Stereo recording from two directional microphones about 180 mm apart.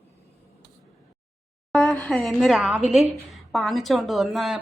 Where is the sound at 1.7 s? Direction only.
Centre (ahead or behind).